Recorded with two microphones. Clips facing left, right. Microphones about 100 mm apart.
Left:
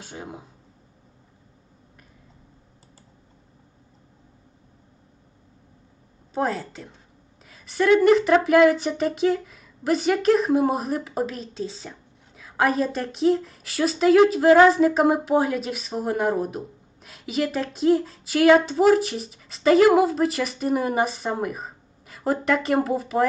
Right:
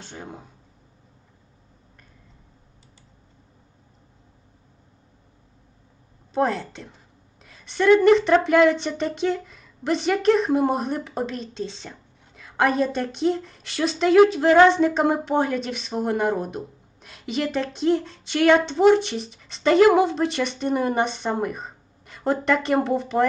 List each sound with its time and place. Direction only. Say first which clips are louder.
0.0 s speech: left 1 dB; 5° left (ahead or behind)
6.3 s speech: right 2 dB; centre (ahead or behind)